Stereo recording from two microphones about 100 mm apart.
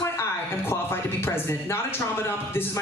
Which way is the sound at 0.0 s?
25° left (ahead or behind).